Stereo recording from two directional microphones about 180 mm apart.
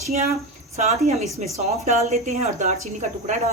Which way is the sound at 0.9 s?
40° right (ahead or behind).